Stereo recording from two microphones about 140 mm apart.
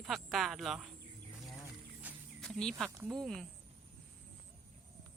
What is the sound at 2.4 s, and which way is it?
Speech, 5° left (ahead or behind).